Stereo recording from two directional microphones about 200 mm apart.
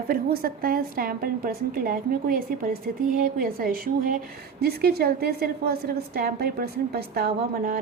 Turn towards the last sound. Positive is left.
turn(degrees=-50)  # may be behind; listen again after turning